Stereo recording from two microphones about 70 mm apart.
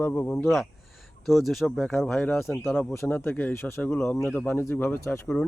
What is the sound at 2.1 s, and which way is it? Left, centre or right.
Speech, left.